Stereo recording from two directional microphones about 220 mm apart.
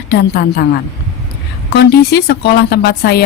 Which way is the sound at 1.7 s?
50° left (ahead or behind).